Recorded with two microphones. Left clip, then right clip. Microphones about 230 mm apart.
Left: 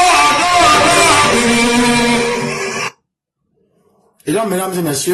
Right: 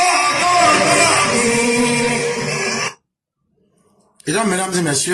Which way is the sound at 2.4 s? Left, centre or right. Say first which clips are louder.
Left 1 dB; left.